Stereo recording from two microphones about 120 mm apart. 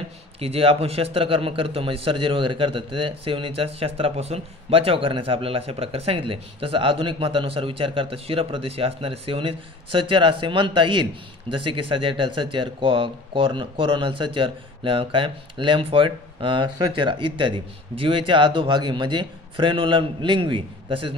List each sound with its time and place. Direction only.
0.4 s a man's voice: 50° right (ahead or behind)